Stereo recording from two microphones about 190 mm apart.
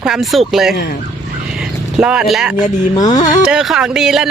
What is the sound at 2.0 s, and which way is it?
Speech, 5° right (ahead or behind).